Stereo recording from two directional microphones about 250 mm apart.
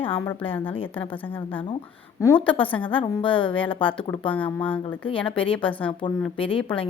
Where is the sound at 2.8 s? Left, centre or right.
Left.